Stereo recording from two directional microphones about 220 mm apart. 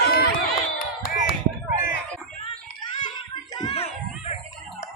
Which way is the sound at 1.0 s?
40° left (ahead or behind).